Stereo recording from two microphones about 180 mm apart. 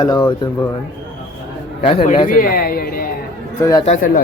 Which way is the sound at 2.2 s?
50° left (ahead or behind).